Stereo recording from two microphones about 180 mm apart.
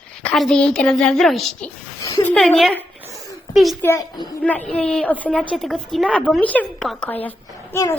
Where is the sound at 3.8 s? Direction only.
20° left (ahead or behind).